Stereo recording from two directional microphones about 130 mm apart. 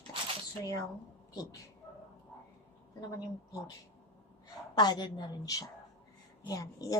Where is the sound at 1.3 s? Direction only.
30° left (ahead or behind).